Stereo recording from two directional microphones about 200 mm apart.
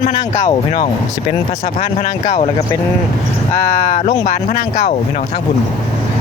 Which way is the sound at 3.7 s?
40° left (ahead or behind).